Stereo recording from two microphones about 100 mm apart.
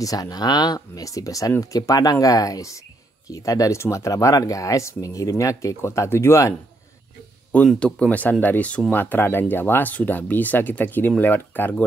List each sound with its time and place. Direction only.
0.0 s speech: 40° left (ahead or behind)
7.5 s speech: 10° left (ahead or behind)